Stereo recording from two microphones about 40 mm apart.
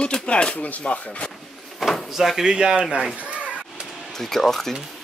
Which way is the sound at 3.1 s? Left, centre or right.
Right.